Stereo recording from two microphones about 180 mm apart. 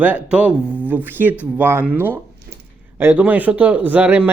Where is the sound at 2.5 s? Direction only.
60° right (ahead or behind).